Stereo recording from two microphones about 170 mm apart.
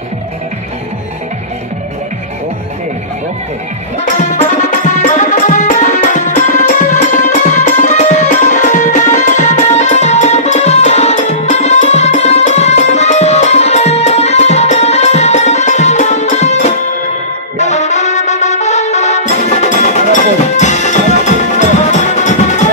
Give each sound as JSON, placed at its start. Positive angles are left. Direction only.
{"t": 4.0, "sound": "music", "side_deg": 45}